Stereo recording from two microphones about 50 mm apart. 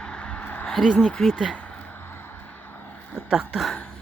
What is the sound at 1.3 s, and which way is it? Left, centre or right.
Speech, centre.